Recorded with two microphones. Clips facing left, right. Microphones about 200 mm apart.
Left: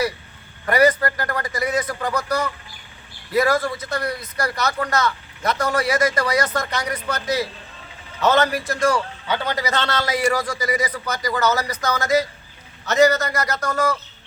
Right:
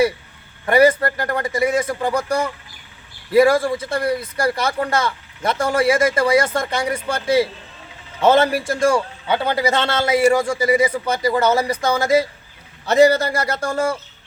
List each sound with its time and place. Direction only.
0.6 s speech: 25° right (ahead or behind)